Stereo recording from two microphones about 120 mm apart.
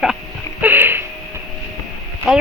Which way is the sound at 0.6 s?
15° right (ahead or behind).